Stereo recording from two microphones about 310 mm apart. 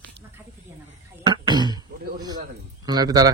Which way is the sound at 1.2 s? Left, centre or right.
Centre.